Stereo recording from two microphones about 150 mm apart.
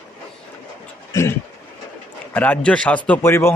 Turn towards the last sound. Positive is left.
turn(degrees=15)  # may be behind; listen again after turning